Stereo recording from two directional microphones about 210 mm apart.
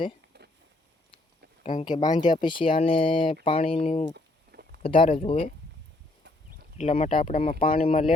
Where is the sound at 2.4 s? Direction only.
25° left (ahead or behind).